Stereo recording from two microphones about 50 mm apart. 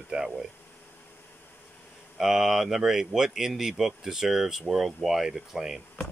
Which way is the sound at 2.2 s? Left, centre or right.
Centre.